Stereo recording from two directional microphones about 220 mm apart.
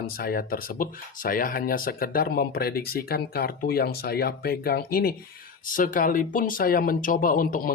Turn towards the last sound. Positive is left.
turn(degrees=40)  # may be behind; listen again after turning